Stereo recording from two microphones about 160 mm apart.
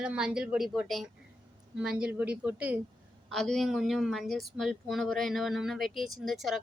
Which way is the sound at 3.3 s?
Centre (ahead or behind).